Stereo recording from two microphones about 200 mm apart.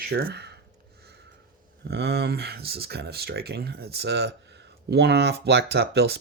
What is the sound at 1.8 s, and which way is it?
Speech, 55° right (ahead or behind).